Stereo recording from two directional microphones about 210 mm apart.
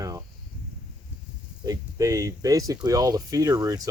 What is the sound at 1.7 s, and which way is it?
Speech, 15° right (ahead or behind).